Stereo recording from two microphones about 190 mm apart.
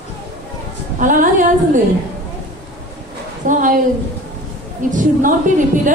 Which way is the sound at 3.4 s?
45° right (ahead or behind).